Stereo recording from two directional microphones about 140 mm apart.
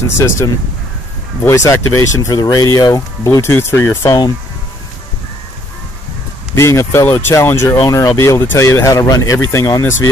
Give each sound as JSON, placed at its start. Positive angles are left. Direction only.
{"t": 1.4, "sound": "speech", "side_deg": 20}
{"t": 6.5, "sound": "speech", "side_deg": 20}